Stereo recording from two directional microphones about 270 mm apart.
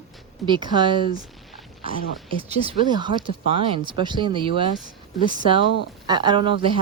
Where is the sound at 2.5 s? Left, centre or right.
Centre.